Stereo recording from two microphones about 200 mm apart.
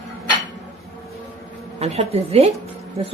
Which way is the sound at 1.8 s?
30° right (ahead or behind).